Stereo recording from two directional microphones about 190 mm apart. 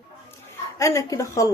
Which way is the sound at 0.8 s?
15° left (ahead or behind).